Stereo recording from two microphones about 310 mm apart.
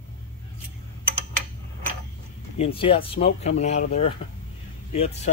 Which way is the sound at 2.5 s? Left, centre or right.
Centre.